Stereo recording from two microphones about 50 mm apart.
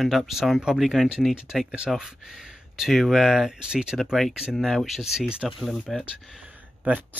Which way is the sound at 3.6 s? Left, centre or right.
Centre.